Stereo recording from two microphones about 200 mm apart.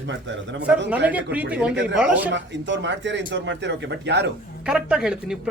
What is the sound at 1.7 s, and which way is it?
Speech, 60° right (ahead or behind).